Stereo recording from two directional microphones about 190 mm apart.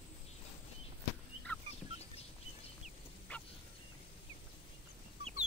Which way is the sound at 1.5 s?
10° left (ahead or behind).